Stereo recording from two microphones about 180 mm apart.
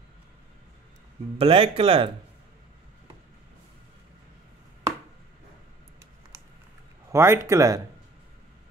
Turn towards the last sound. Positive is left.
turn(degrees=-20)  # may be behind; listen again after turning